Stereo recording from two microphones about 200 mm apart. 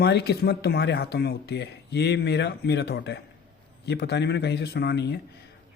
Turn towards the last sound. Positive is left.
turn(degrees=55)  # may be behind; listen again after turning